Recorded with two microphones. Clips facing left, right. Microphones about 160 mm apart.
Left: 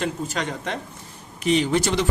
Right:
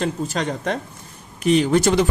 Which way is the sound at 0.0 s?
40° right (ahead or behind).